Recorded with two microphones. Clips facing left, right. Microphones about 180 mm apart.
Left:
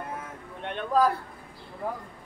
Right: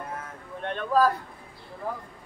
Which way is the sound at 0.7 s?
20° left (ahead or behind).